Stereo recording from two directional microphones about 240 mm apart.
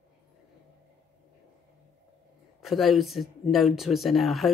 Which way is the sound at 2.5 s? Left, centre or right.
Centre.